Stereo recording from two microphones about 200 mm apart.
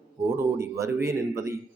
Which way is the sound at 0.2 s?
15° right (ahead or behind).